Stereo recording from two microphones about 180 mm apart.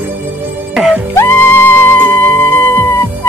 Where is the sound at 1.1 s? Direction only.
10° left (ahead or behind).